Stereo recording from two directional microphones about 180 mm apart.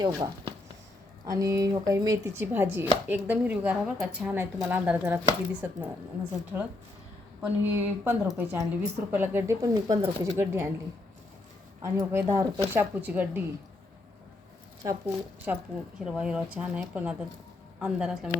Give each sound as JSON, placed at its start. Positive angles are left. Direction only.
{"t": 0.0, "sound": "a woman's voice", "side_deg": -25}
{"t": 7.4, "sound": "a woman's voice", "side_deg": -10}
{"t": 11.8, "sound": "a woman's voice", "side_deg": -15}
{"t": 14.8, "sound": "a woman's voice", "side_deg": -15}
{"t": 16.0, "sound": "a woman's voice", "side_deg": -5}